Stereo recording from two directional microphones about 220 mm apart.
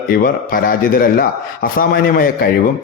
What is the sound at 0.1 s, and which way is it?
A man's voice, 40° left (ahead or behind).